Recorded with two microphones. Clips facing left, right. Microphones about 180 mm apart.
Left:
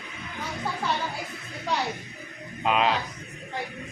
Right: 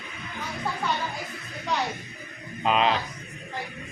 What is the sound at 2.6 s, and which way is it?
Speech, 5° left (ahead or behind).